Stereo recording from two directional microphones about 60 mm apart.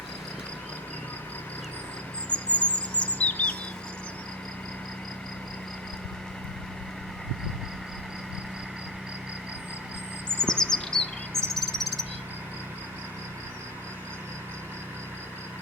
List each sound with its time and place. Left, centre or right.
2.3 s chirp: left
10.4 s bird: centre